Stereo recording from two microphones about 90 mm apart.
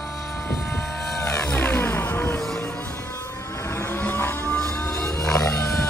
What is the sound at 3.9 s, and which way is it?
Vehicle, 25° left (ahead or behind).